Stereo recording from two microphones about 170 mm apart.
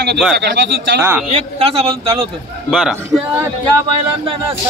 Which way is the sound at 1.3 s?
35° right (ahead or behind).